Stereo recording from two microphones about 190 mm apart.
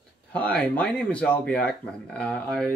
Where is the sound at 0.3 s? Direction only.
5° left (ahead or behind).